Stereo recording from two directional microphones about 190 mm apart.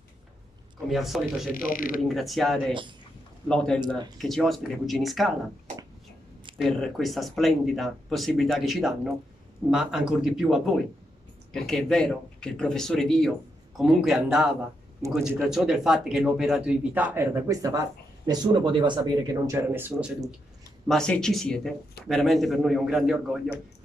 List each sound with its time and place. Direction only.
0.8 s speech: centre (ahead or behind)
1.5 s speech: 45° left (ahead or behind)
2.0 s speech: centre (ahead or behind)
6.6 s speech: centre (ahead or behind)
15.0 s speech: 15° right (ahead or behind)
15.4 s speech: 5° right (ahead or behind); by 18.9 s 25° right (ahead or behind)
19.4 s speech: 10° right (ahead or behind)